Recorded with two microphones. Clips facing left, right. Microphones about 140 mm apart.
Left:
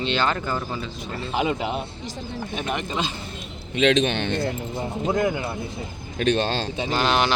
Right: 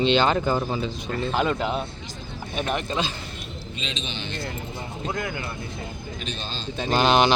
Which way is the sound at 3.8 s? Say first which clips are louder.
Left 16 dB; 70° left (ahead or behind).